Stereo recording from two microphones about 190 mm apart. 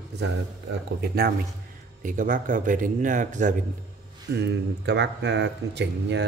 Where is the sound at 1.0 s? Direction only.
55° right (ahead or behind).